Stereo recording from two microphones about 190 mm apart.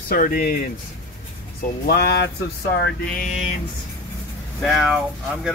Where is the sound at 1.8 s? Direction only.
55° left (ahead or behind).